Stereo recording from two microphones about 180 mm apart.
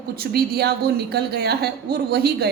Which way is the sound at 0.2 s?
60° right (ahead or behind).